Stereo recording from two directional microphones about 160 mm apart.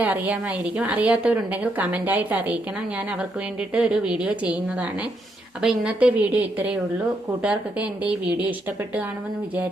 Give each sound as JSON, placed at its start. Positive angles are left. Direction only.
{"t": 0.0, "sound": "a woman's voice", "side_deg": -10}